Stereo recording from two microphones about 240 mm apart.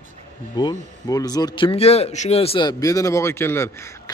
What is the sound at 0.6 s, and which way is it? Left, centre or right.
Speech, centre.